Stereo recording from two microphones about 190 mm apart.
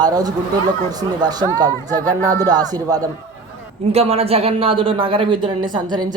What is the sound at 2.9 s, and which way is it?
Speech, 20° right (ahead or behind).